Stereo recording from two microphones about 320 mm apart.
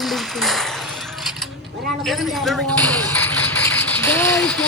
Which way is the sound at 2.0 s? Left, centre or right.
Centre.